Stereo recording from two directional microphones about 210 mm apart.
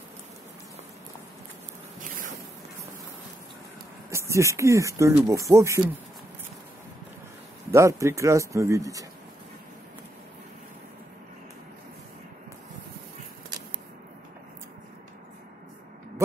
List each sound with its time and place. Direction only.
2.0 s a sound: 40° right (ahead or behind)
4.1 s speech: 15° right (ahead or behind)
7.7 s speech: 15° right (ahead or behind)